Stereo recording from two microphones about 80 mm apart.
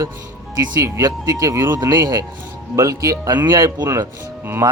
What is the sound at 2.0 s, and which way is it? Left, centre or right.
Speech, right.